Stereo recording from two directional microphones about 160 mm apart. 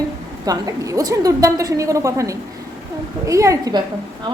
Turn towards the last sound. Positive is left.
turn(degrees=-20)  # may be behind; listen again after turning